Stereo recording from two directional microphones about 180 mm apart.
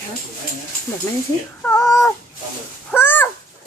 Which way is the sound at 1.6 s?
15° left (ahead or behind).